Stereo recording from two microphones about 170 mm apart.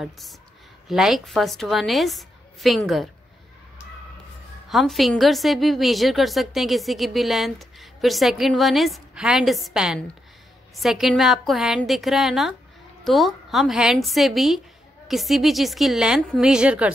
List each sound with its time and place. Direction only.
0.0 s a woman's voice: centre (ahead or behind)
4.6 s a woman's voice: centre (ahead or behind)